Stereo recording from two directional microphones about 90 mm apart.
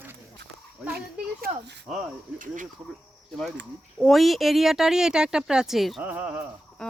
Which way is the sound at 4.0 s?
Centre (ahead or behind).